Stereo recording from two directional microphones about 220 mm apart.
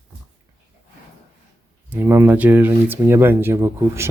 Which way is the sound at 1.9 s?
10° right (ahead or behind).